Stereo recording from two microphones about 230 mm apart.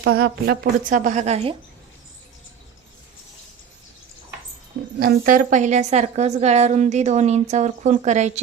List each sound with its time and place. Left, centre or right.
0.0 s a woman's voice: right
4.9 s a woman's voice: right